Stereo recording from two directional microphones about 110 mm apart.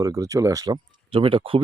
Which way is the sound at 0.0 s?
30° right (ahead or behind).